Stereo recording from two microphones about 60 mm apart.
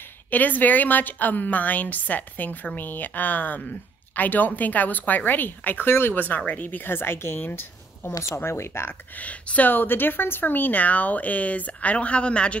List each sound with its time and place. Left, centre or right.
0.3 s a woman's voice: left
9.1 s a woman's voice: left